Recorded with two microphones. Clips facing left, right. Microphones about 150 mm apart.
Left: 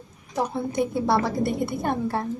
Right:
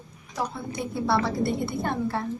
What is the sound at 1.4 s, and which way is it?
Speech, 15° left (ahead or behind).